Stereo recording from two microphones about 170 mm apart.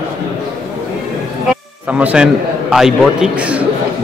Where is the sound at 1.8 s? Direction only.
5° right (ahead or behind).